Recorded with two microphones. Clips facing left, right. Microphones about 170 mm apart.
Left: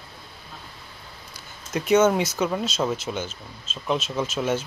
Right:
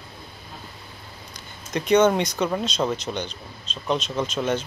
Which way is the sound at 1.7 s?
5° left (ahead or behind).